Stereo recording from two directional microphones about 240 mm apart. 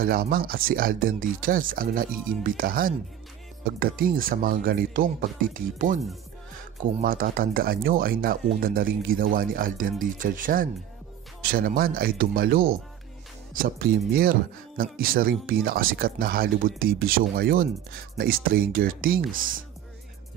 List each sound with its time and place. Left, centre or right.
0.0 s speech: right
7.0 s speech: right